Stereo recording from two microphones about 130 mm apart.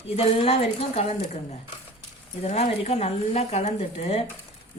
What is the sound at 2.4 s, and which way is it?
A woman's voice, 50° left (ahead or behind).